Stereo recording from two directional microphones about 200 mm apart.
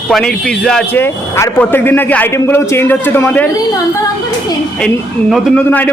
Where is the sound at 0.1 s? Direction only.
Centre (ahead or behind).